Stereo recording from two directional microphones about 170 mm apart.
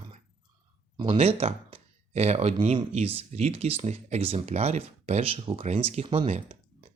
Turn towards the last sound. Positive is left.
turn(degrees=-40)  # may be behind; listen again after turning